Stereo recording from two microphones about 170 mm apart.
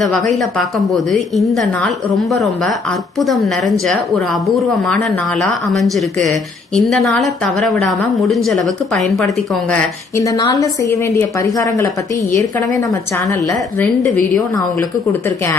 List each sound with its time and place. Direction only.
0.3 s speech: centre (ahead or behind)
10.2 s a woman's voice: 20° left (ahead or behind)